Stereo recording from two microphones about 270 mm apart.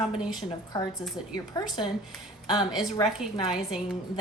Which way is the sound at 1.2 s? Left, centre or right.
Centre.